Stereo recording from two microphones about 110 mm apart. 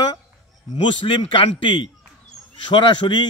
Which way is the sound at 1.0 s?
50° left (ahead or behind).